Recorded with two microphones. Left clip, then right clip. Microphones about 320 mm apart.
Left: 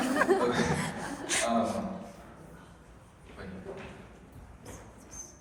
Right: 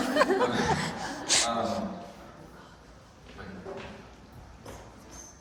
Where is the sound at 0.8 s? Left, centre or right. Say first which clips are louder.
Right 2 dB; left.